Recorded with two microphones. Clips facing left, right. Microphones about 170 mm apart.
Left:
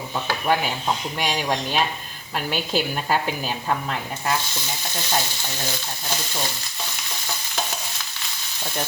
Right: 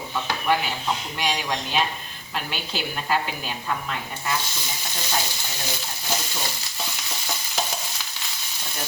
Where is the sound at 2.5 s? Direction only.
45° left (ahead or behind).